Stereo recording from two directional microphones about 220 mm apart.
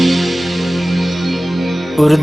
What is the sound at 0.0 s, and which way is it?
Music, centre (ahead or behind).